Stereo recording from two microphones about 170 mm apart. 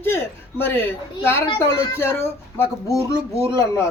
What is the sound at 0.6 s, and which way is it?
Speech, 10° left (ahead or behind).